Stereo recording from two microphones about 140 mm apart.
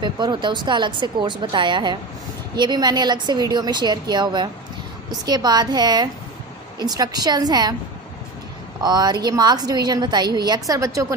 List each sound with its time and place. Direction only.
0.0 s a woman's voice: 30° right (ahead or behind)
8.8 s a woman's voice: 30° right (ahead or behind)